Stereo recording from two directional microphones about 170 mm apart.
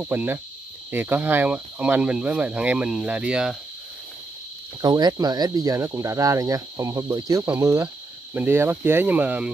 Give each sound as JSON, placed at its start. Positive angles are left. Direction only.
{"t": 0.0, "sound": "speech", "side_deg": -10}
{"t": 4.8, "sound": "speech", "side_deg": -25}